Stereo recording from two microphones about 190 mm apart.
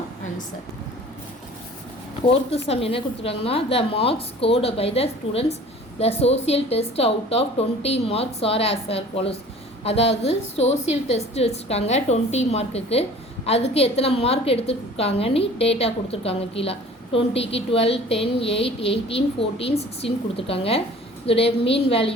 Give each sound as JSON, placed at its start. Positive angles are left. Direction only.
{"t": 2.3, "sound": "a woman's voice", "side_deg": 30}